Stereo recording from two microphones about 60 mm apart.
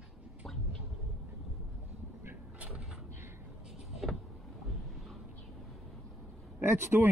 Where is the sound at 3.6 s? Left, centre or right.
Centre.